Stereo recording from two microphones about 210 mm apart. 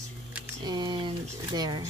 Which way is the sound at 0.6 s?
20° right (ahead or behind).